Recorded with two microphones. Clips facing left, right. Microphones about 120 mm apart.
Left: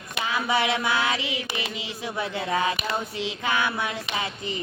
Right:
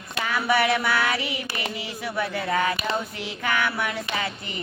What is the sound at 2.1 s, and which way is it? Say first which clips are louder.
Speech: right 1 dB; 20° left (ahead or behind).